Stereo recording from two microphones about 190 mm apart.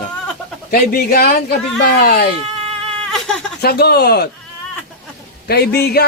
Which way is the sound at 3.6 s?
55° left (ahead or behind).